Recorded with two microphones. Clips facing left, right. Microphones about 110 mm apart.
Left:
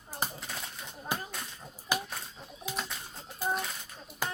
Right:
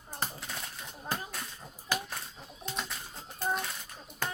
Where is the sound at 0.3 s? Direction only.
Centre (ahead or behind).